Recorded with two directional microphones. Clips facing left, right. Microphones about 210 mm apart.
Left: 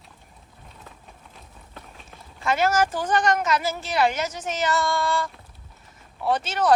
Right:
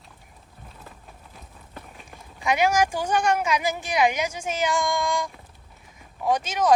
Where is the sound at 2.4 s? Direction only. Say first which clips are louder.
Even; 15° right (ahead or behind).